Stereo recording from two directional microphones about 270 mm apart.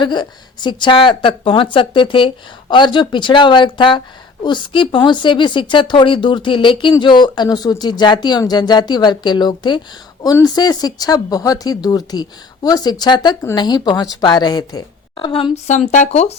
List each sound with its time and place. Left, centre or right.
0.0 s speech: centre